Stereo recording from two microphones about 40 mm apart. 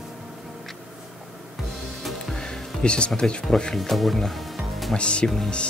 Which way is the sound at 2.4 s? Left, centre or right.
Centre.